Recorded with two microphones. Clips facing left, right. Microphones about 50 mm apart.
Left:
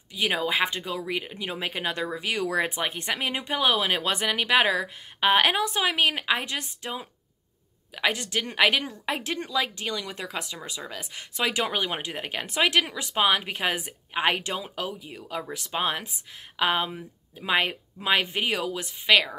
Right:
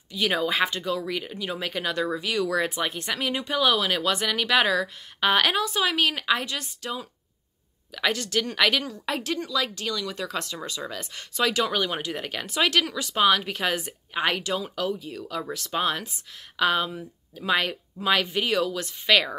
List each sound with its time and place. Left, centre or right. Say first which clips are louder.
0.1 s speech: right 1 dB; centre
10.3 s speech: right 3 dB; centre